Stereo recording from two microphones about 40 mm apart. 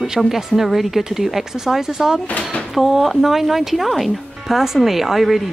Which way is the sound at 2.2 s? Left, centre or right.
Left.